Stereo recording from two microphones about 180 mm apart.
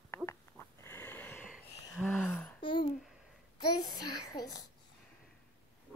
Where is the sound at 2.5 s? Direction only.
30° left (ahead or behind).